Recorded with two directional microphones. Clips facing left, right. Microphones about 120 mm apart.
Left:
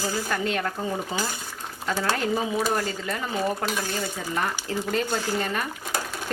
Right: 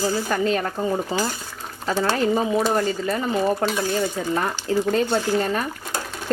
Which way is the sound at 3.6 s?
30° right (ahead or behind).